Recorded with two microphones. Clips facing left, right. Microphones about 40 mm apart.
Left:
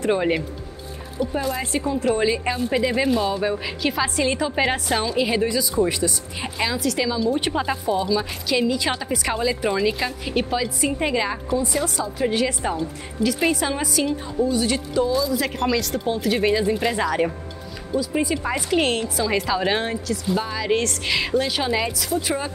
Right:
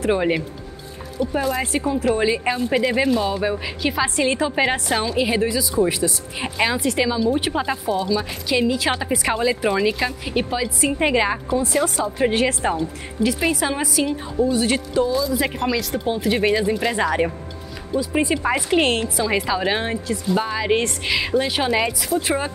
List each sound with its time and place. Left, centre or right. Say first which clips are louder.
0.0 s a woman's voice: right 1 dB; centre
6.6 s speech: right 3 dB; right
7.1 s a woman's voice: right 2 dB; centre
11.0 s speech: right 5 dB; right
11.8 s a woman's voice: right 3 dB; right
12.7 s speech: right 2 dB; centre
20.3 s speech: right 3 dB; centre
21.0 s speech: right 1 dB; centre